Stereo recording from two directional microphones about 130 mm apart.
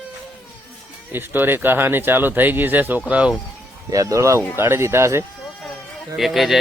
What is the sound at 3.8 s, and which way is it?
Speech, 25° right (ahead or behind).